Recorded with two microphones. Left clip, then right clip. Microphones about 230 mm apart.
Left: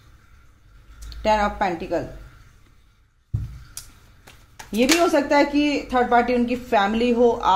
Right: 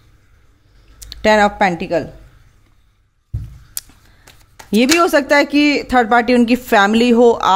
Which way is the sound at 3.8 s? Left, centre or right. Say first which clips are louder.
Right 8 dB; right.